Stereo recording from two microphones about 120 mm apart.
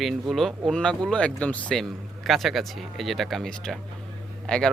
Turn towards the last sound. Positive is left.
turn(degrees=5)  # may be behind; listen again after turning